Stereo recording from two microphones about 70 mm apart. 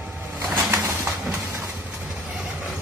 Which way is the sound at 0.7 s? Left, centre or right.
Right.